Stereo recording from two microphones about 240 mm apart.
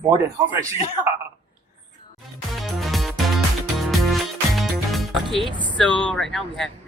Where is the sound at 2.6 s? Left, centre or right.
Centre.